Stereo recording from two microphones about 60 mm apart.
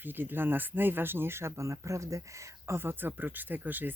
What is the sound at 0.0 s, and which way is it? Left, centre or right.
Speech, right.